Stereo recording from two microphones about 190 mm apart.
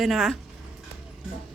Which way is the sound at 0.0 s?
Centre (ahead or behind).